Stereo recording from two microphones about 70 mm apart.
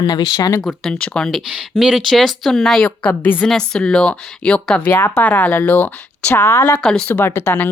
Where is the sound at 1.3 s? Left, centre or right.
Centre.